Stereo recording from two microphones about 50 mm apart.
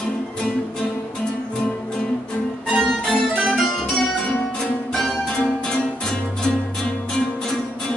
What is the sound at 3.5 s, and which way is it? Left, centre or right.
Music, centre.